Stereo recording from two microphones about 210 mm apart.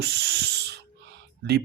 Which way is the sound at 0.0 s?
50° right (ahead or behind).